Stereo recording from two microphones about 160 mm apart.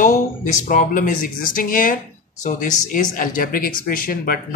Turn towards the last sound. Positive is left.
turn(degrees=65)  # may be behind; listen again after turning